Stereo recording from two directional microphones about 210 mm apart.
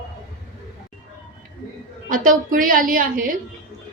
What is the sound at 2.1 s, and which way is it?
A woman's voice, 40° right (ahead or behind).